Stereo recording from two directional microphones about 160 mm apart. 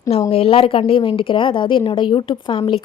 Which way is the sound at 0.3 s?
35° left (ahead or behind).